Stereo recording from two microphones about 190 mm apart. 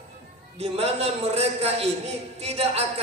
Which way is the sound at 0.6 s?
30° right (ahead or behind).